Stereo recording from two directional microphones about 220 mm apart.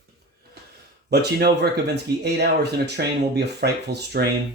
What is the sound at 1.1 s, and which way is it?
Speech, 45° right (ahead or behind).